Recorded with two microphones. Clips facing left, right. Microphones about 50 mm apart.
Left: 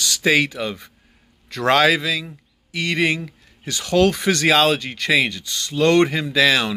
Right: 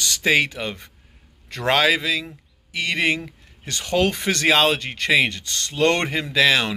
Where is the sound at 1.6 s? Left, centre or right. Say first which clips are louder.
Left 3 dB; centre.